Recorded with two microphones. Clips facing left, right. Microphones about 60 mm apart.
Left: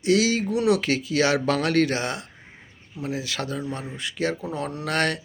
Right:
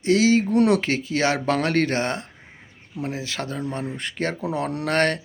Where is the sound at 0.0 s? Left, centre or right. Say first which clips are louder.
Right 3 dB; right.